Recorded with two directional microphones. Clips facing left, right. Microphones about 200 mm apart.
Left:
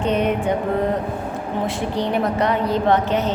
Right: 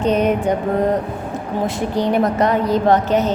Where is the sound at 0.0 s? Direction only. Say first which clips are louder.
Right 3 dB; 40° right (ahead or behind).